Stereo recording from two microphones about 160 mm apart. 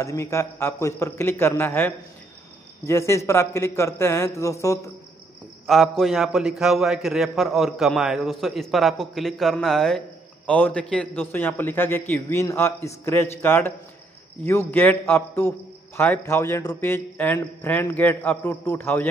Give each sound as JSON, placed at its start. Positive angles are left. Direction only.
{"t": 0.0, "sound": "a man's voice", "side_deg": 20}
{"t": 5.7, "sound": "a man's voice", "side_deg": 0}